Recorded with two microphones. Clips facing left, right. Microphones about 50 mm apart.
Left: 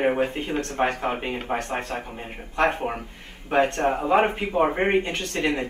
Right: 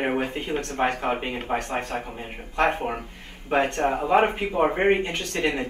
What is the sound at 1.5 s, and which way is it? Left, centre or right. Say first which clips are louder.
Speech: right 1 dB; centre.